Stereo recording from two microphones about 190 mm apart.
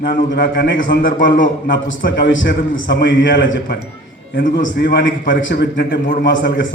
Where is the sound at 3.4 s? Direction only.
80° left.